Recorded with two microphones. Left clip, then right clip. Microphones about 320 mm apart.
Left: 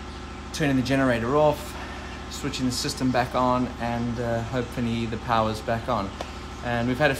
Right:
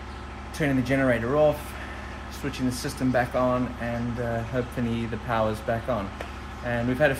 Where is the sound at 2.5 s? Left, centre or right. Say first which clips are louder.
Left 3 dB; centre.